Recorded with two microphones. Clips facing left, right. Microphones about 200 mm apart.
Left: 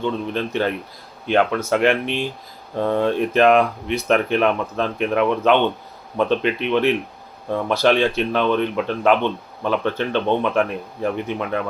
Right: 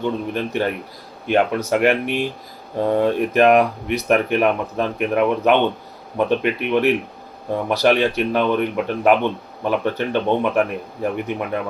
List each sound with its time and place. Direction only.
0.0 s speech: 10° right (ahead or behind)